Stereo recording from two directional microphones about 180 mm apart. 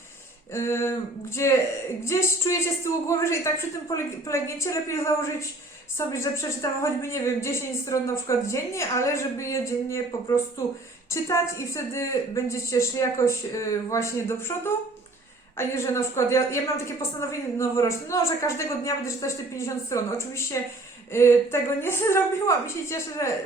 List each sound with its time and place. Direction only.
0.5 s a woman's voice: 15° left (ahead or behind)